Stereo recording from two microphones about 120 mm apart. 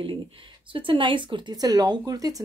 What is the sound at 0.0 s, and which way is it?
Speech, 45° right (ahead or behind).